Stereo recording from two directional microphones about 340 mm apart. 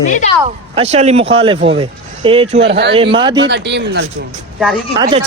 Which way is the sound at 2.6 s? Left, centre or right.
Right.